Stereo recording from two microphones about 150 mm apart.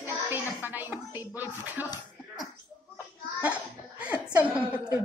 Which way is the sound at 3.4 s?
10° right (ahead or behind).